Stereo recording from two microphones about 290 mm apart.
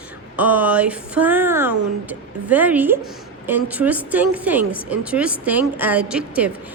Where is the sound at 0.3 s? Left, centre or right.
Centre.